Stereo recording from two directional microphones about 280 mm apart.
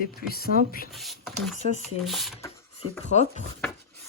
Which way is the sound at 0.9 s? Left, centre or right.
Centre.